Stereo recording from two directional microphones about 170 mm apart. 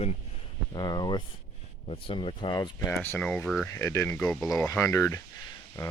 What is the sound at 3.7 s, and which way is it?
Speech, 15° left (ahead or behind).